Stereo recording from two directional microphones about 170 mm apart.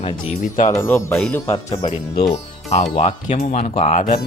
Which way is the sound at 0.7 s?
15° left (ahead or behind).